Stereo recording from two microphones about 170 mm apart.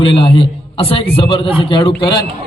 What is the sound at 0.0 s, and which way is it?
A man's voice, 30° left (ahead or behind).